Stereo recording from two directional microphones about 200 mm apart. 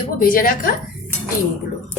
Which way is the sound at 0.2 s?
45° left (ahead or behind).